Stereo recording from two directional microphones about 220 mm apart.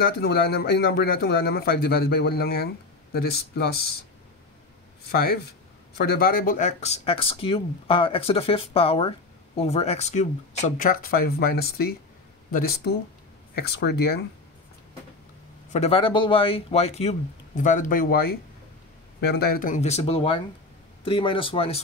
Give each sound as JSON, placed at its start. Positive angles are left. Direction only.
{"t": 0.0, "sound": "speech", "side_deg": 45}
{"t": 5.1, "sound": "speech", "side_deg": 45}
{"t": 15.7, "sound": "speech", "side_deg": 25}